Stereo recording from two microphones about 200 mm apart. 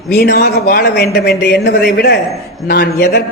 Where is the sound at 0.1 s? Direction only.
50° left (ahead or behind).